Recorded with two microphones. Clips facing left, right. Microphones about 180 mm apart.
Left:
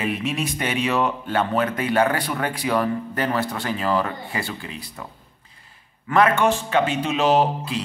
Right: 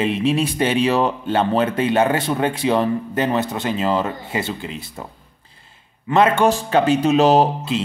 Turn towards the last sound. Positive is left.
turn(degrees=-25)  # may be behind; listen again after turning